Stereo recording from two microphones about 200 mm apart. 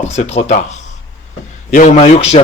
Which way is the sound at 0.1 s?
35° left (ahead or behind).